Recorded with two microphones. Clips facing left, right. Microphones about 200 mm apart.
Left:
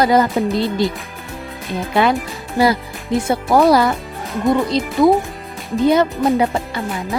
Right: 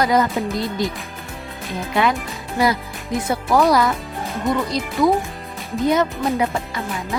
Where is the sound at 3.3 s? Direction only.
30° left (ahead or behind).